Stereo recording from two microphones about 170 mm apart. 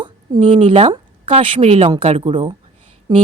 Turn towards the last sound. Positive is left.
turn(degrees=-25)  # may be behind; listen again after turning